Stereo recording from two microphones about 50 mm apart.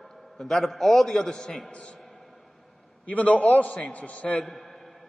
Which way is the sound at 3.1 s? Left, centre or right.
Left.